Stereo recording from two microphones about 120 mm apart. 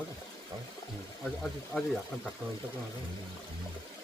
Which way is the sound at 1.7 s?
5° left (ahead or behind).